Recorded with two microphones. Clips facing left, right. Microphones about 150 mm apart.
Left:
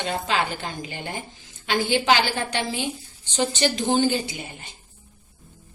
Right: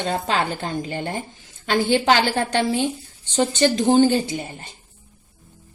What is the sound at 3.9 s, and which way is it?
Speech, 45° right (ahead or behind).